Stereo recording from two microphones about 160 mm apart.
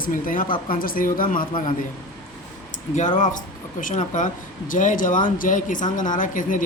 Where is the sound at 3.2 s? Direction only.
55° left (ahead or behind).